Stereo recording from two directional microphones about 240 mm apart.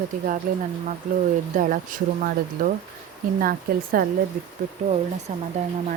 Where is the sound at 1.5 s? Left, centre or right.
Right.